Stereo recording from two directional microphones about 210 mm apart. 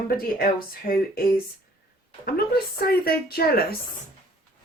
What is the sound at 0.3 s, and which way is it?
Speech, 45° left (ahead or behind).